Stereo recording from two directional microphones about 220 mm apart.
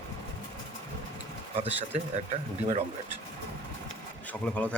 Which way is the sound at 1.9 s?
30° right (ahead or behind).